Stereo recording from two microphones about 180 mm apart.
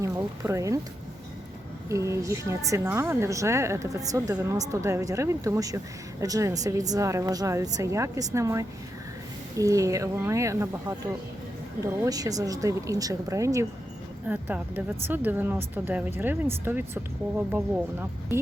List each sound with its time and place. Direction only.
0.0 s speech: 15° right (ahead or behind)
1.9 s a woman's voice: 15° right (ahead or behind)
12.0 s a woman's voice: 20° right (ahead or behind)